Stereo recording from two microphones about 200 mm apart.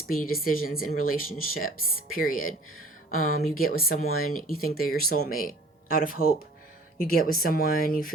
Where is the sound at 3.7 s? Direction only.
50° left (ahead or behind).